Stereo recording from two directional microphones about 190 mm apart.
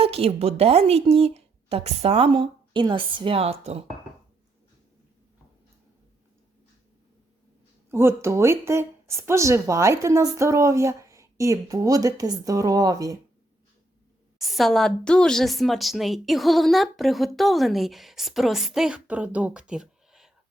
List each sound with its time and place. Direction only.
0.0 s a woman's voice: 30° right (ahead or behind)
7.9 s a woman's voice: 15° right (ahead or behind)
14.3 s a woman's voice: centre (ahead or behind)